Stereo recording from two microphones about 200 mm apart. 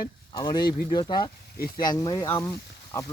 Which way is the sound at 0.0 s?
20° left (ahead or behind).